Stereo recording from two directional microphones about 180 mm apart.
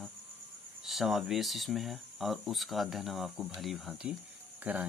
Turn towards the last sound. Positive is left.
turn(degrees=-10)  # may be behind; listen again after turning